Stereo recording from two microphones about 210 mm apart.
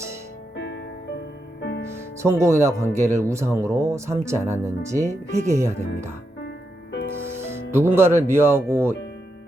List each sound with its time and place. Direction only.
0.5 s music: 55° left (ahead or behind)
2.2 s speech: 15° right (ahead or behind)
5.0 s speech: 35° right (ahead or behind)
5.5 s speech: 15° right (ahead or behind)
7.4 s speech: 10° right (ahead or behind)